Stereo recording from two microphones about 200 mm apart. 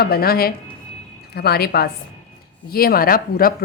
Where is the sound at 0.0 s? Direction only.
50° left (ahead or behind).